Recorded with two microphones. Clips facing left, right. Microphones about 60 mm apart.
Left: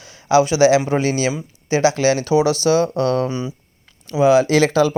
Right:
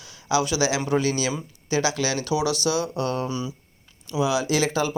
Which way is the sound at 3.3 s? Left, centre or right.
Left.